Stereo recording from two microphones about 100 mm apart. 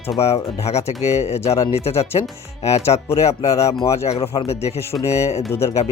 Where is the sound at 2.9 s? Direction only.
70° left (ahead or behind).